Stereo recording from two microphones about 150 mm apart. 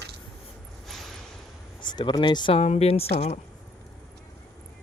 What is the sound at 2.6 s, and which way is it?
Speech, 45° left (ahead or behind).